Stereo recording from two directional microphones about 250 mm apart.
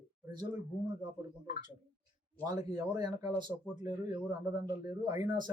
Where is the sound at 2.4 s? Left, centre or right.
Centre.